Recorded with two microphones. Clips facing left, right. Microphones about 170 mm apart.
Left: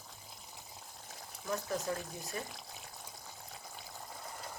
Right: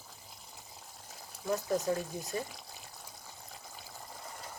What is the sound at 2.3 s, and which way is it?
Speech, 30° right (ahead or behind).